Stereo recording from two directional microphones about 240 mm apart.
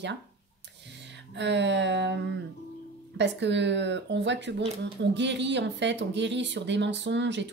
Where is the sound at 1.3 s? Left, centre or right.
Right.